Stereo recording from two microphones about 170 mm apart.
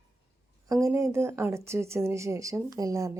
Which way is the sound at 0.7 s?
20° right (ahead or behind).